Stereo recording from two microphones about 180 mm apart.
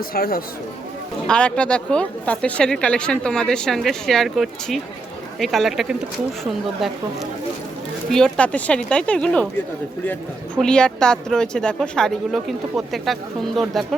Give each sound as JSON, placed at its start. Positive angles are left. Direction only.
{"t": 0.0, "sound": "speech", "side_deg": 55}
{"t": 1.3, "sound": "a woman's voice", "side_deg": 5}
{"t": 10.6, "sound": "a woman's voice", "side_deg": 5}